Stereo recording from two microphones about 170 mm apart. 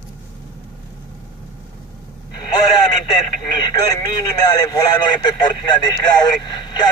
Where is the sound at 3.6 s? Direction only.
25° left (ahead or behind).